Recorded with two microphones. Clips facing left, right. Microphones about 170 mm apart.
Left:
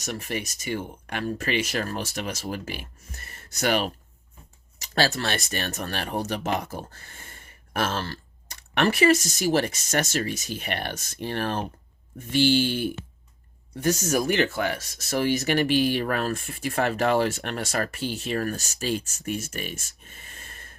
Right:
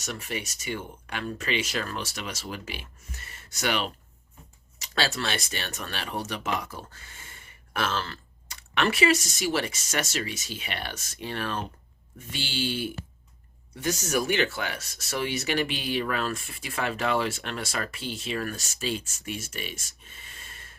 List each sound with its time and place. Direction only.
0.0 s speech: 50° left (ahead or behind)
1.2 s speech: 35° left (ahead or behind)
1.5 s speech: 55° left (ahead or behind)
4.9 s speech: 45° left (ahead or behind)
12.5 s speech: 55° left (ahead or behind)